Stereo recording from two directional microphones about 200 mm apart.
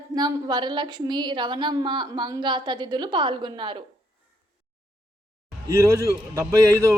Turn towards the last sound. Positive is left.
turn(degrees=-15)  # may be behind; listen again after turning